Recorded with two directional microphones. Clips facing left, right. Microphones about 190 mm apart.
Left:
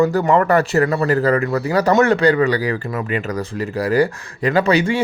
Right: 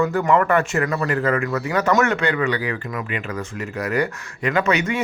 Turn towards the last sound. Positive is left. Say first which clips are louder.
# left 4 dB
turn(degrees=30)  # may be behind; listen again after turning